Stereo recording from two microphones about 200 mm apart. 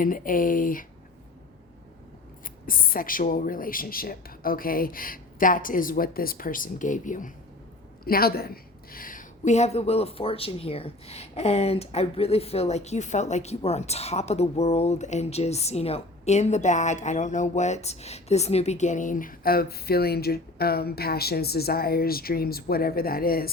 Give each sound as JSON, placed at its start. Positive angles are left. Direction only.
{"t": 0.0, "sound": "speech", "side_deg": 45}
{"t": 2.6, "sound": "a woman's voice", "side_deg": 45}